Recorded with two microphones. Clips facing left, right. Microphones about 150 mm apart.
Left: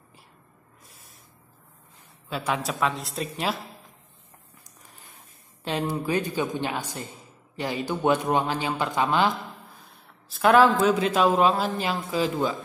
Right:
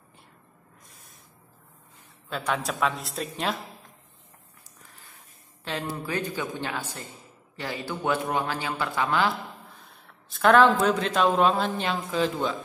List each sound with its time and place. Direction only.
2.2 s a man's voice: 5° left (ahead or behind)
5.6 s a woman's voice: 20° left (ahead or behind)
9.8 s a man's voice: centre (ahead or behind)